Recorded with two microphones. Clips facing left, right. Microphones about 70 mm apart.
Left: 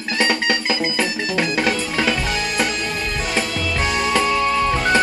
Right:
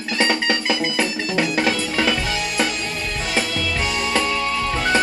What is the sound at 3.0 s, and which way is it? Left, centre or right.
Music, left.